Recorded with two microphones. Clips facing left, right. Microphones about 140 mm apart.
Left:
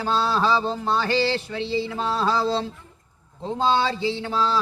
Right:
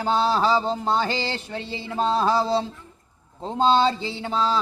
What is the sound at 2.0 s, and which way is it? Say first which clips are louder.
Speech: right 4 dB; 20° right (ahead or behind).